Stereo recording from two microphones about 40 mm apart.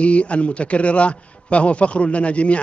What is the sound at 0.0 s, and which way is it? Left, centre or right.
A man's voice, left.